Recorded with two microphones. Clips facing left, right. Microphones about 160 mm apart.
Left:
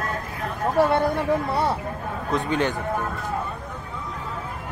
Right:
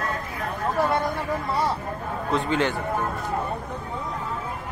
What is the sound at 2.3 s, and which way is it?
Speech, 15° left (ahead or behind).